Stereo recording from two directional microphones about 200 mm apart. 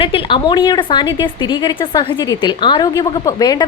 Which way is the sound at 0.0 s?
25° left (ahead or behind).